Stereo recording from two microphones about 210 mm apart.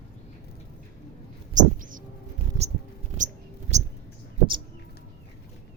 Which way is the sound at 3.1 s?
35° right (ahead or behind).